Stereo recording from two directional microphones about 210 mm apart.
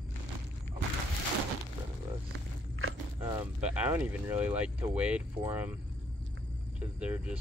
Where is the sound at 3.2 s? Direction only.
15° right (ahead or behind).